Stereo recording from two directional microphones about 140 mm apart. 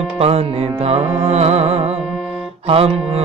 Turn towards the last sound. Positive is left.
turn(degrees=-45)  # may be behind; listen again after turning